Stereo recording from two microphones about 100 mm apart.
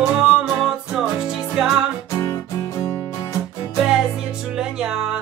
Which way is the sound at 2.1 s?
30° left (ahead or behind).